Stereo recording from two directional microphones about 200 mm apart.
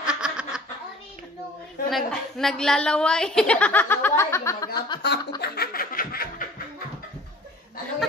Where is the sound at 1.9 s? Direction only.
Centre (ahead or behind); by 5.0 s 20° left (ahead or behind).